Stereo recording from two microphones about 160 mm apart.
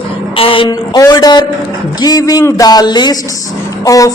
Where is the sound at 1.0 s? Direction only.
25° left (ahead or behind).